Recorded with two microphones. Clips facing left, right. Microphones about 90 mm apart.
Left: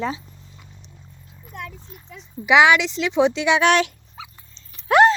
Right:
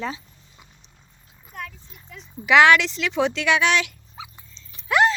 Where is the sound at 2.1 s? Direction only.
15° left (ahead or behind).